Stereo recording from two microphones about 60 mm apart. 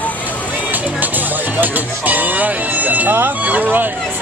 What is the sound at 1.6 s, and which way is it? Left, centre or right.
Speech, right.